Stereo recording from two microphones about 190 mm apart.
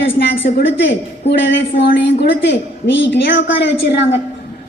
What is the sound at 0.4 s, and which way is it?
A woman's voice, 55° left (ahead or behind).